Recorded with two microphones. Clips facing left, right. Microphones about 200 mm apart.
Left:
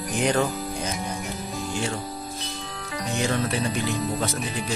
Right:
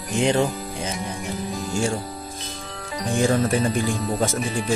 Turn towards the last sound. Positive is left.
turn(degrees=-45)  # may be behind; listen again after turning